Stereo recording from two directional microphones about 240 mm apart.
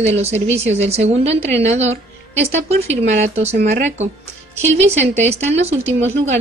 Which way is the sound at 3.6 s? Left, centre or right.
Right.